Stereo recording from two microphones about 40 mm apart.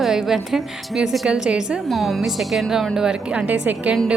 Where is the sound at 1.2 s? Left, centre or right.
Centre.